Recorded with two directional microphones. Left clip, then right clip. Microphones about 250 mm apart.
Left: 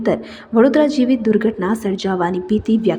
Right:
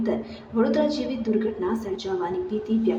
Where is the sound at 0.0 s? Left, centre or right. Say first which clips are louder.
Left 8 dB; left.